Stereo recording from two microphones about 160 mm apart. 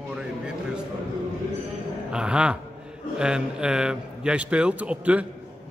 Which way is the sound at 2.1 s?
5° right (ahead or behind).